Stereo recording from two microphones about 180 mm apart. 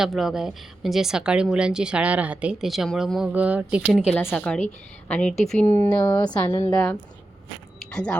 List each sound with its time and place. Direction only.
0.0 s speech: centre (ahead or behind)
4.1 s speech: 10° left (ahead or behind)
6.1 s a woman's voice: 25° left (ahead or behind)
7.8 s a sound: 5° left (ahead or behind)